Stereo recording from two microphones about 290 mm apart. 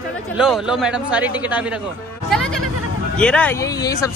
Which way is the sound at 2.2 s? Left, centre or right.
Centre.